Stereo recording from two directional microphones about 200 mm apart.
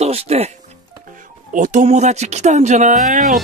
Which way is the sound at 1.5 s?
40° right (ahead or behind).